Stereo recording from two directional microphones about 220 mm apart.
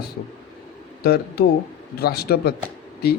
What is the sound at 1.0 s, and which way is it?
A man's voice, 45° left (ahead or behind).